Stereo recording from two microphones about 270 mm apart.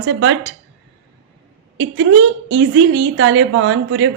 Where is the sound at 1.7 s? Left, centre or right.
Right.